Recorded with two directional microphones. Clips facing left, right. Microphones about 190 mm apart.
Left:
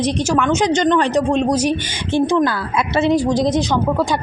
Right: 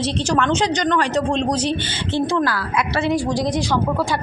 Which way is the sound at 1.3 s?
10° left (ahead or behind).